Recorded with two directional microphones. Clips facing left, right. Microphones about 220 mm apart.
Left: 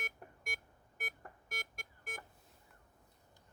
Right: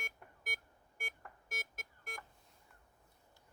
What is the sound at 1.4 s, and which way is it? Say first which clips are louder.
Beep: even; centre (ahead or behind).